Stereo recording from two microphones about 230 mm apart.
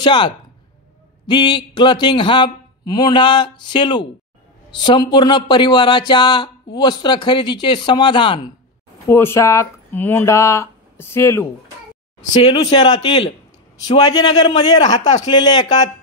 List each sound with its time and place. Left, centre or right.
0.0 s speech: left
12.5 s speech: centre